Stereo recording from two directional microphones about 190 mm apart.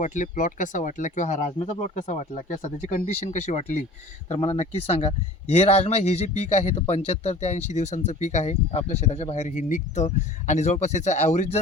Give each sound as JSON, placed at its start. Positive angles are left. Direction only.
{"t": 0.0, "sound": "speech", "side_deg": 40}